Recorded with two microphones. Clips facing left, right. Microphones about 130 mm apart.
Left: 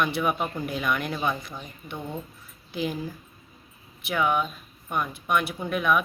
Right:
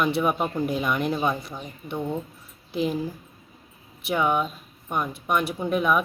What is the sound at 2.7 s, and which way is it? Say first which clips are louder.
Speech: right 4 dB; 30° right (ahead or behind).